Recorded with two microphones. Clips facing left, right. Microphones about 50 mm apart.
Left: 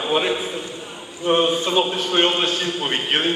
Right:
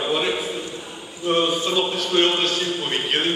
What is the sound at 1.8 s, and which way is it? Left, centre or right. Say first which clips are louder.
Speech: even; centre.